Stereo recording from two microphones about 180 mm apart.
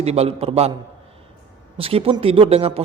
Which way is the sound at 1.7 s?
30° right (ahead or behind).